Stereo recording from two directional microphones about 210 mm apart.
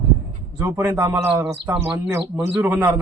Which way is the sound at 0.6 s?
10° right (ahead or behind).